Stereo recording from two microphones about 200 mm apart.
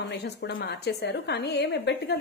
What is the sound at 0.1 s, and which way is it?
A woman's voice, 60° left (ahead or behind).